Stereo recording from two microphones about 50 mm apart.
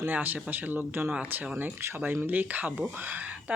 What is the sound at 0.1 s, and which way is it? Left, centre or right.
Speech, right.